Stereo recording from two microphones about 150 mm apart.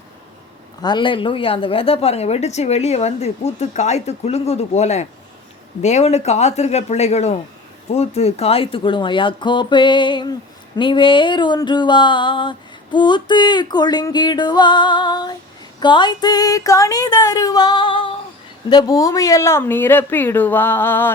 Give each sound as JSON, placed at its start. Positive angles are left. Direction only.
{"t": 0.8, "sound": "a woman's voice", "side_deg": 30}
{"t": 7.9, "sound": "a sound", "side_deg": 45}
{"t": 15.8, "sound": "speech", "side_deg": 30}